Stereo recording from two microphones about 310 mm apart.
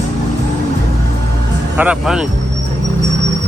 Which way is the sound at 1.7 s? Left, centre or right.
Centre.